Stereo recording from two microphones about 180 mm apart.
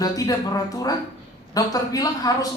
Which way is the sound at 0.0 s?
20° left (ahead or behind).